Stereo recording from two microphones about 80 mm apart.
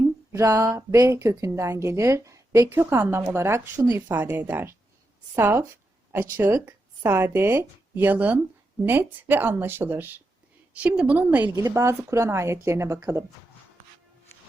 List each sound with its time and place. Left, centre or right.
0.3 s speech: right
2.6 s speech: right
4.4 s a woman's voice: right
11.7 s speech: right